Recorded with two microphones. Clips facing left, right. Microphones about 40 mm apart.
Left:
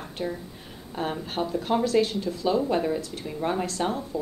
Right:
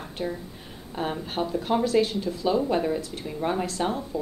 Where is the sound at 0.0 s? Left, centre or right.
Centre.